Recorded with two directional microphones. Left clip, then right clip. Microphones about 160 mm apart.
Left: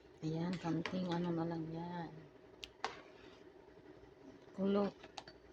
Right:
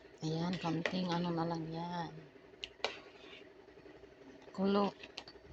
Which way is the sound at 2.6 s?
20° left (ahead or behind).